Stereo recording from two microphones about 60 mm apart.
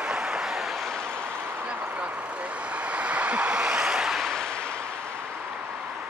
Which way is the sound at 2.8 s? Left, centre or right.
Right.